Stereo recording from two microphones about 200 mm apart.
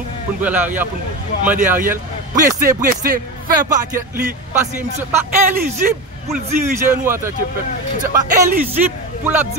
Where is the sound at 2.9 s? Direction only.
45° right (ahead or behind).